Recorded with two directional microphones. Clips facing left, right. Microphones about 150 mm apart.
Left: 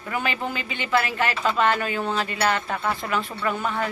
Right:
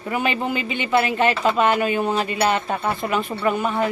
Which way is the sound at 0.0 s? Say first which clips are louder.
Right 4 dB; 20° right (ahead or behind).